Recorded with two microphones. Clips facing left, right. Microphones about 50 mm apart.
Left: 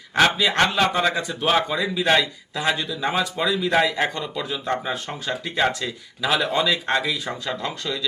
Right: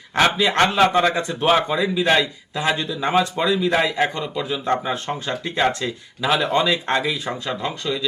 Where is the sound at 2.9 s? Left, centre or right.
Centre.